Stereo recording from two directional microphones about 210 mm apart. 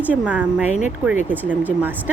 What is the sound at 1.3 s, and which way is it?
Speech, 10° right (ahead or behind).